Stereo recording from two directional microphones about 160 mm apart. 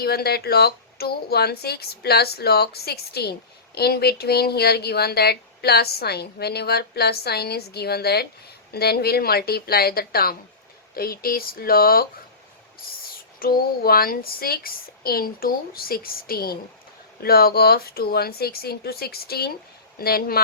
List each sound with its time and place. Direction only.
0.0 s speech: 75° left (ahead or behind)
13.4 s speech: 65° left (ahead or behind)